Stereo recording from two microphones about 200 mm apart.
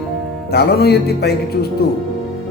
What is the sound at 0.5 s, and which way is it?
Speech, 55° left (ahead or behind).